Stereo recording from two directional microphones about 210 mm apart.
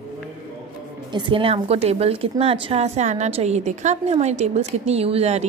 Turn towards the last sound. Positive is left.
turn(degrees=-30)  # may be behind; listen again after turning